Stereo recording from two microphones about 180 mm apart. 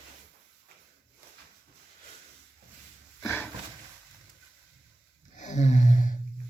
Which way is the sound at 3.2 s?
10° left (ahead or behind).